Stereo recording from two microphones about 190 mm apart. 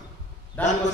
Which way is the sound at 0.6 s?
10° left (ahead or behind).